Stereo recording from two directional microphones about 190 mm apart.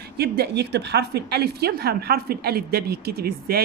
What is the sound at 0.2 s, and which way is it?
A woman's voice, 60° right (ahead or behind).